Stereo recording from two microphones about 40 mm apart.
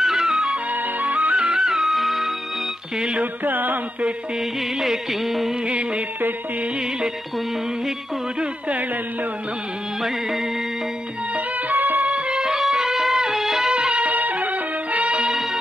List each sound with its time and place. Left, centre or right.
0.0 s music: centre
1.0 s music: right
1.3 s music: centre
3.4 s music: right
4.7 s music: centre
5.7 s music: right
11.7 s music: right
12.1 s music: right
12.4 s music: centre
13.7 s music: right
14.0 s music: right